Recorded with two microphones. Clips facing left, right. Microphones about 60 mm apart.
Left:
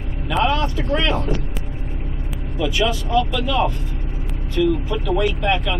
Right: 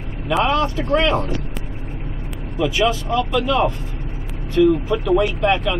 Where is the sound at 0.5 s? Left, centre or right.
Right.